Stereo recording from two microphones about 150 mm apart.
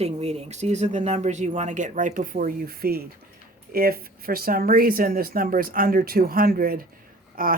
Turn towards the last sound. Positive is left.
turn(degrees=-70)  # may be behind; listen again after turning